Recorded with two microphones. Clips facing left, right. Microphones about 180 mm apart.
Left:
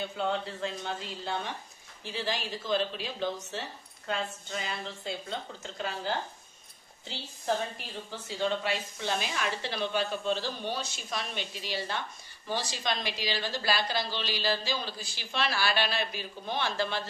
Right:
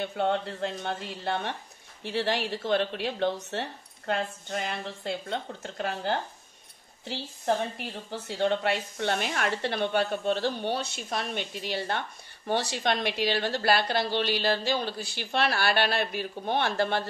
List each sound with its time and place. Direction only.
0.0 s speech: 60° right (ahead or behind)